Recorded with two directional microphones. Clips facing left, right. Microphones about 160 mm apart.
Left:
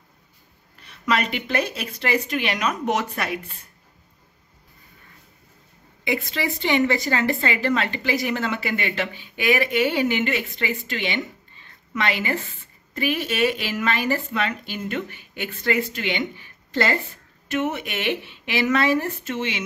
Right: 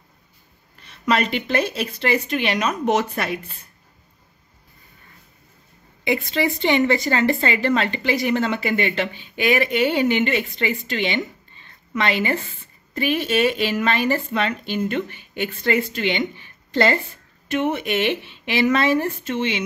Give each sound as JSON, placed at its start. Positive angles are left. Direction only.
{"t": 1.0, "sound": "a woman's voice", "side_deg": -30}
{"t": 6.0, "sound": "a woman's voice", "side_deg": -25}